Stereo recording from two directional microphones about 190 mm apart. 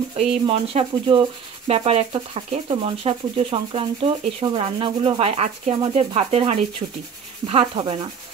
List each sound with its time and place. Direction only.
0.1 s rub: 30° right (ahead or behind)